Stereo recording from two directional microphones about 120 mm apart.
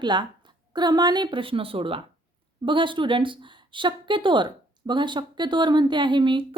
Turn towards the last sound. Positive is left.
turn(degrees=-40)  # may be behind; listen again after turning